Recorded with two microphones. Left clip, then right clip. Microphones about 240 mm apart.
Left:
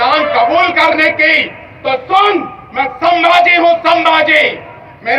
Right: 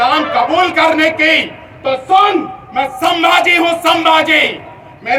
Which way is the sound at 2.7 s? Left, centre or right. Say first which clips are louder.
Left 2 dB; centre.